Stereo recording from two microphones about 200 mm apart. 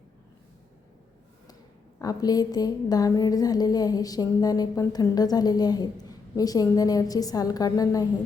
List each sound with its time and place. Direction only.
2.0 s a woman's voice: 20° left (ahead or behind)